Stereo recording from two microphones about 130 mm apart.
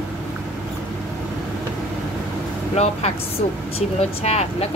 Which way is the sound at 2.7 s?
55° left (ahead or behind).